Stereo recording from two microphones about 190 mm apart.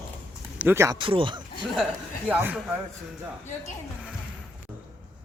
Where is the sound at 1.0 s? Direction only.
25° right (ahead or behind).